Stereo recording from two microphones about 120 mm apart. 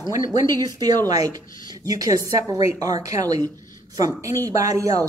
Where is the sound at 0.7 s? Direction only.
35° right (ahead or behind).